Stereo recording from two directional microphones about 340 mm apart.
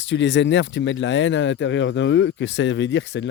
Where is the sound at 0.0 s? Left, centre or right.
Left.